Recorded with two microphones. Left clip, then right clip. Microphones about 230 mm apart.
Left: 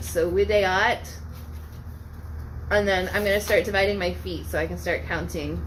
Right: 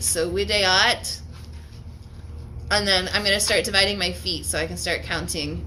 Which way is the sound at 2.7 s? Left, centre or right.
Right.